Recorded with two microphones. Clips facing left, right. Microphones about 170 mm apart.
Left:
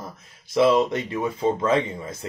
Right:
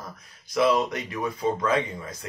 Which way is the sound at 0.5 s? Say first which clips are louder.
Left 4 dB; 25° left (ahead or behind).